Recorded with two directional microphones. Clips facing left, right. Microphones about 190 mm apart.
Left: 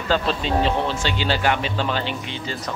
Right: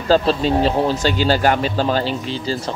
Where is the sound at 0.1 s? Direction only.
35° right (ahead or behind).